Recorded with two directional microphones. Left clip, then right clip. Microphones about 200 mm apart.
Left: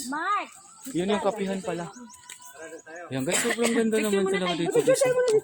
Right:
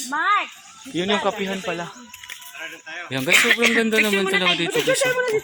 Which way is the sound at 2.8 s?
25° left (ahead or behind).